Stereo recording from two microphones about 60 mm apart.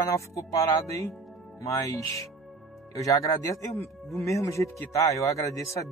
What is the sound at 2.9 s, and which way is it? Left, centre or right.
Speech, left.